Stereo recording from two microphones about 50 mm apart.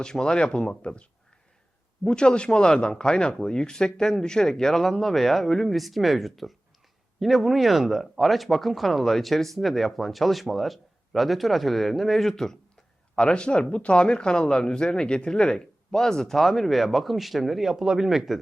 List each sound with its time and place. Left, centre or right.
0.0 s speech: centre
2.0 s speech: centre
13.1 s speech: left; by 18.3 s centre